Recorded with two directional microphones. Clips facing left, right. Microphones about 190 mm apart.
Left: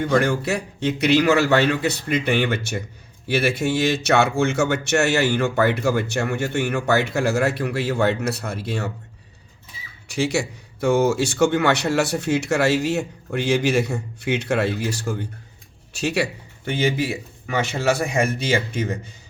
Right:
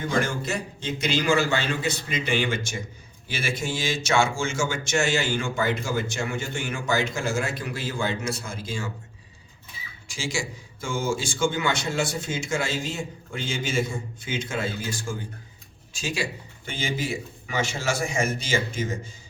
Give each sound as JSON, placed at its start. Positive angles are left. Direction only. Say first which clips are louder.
{"t": 0.0, "sound": "speech", "louder": "left 6 dB", "side_deg": 65}
{"t": 10.1, "sound": "a man's voice", "louder": "left 8 dB", "side_deg": 65}